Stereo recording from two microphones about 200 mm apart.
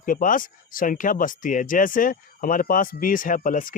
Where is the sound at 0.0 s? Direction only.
40° left (ahead or behind).